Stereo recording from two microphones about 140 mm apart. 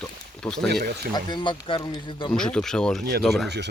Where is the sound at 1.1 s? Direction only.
35° left (ahead or behind).